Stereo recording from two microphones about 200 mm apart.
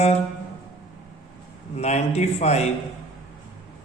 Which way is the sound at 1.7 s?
35° left (ahead or behind).